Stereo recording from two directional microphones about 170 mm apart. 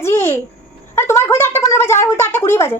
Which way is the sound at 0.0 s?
15° left (ahead or behind).